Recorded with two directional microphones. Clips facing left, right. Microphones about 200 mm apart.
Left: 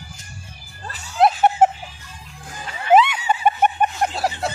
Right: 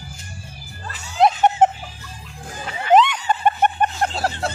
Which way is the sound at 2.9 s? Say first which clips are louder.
Even; 10° left (ahead or behind).